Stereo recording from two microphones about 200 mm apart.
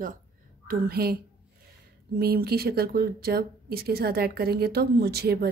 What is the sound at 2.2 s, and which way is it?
Speech, 50° right (ahead or behind).